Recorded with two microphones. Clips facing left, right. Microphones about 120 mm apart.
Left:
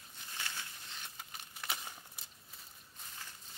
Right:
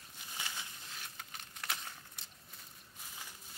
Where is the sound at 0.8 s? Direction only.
Centre (ahead or behind).